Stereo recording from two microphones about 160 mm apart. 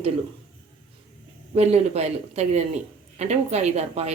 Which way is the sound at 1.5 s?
40° right (ahead or behind).